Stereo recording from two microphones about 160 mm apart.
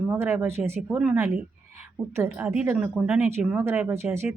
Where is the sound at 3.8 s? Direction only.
15° right (ahead or behind).